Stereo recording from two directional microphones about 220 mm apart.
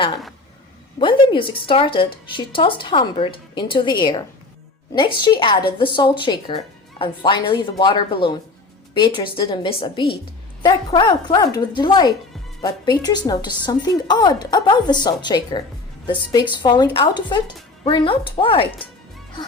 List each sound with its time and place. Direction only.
0.9 s a woman's voice: 20° left (ahead or behind)